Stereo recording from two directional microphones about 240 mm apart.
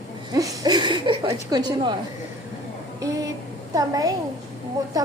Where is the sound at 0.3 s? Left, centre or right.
Centre.